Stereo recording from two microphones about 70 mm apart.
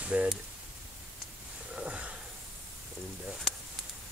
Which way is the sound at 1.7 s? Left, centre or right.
Centre.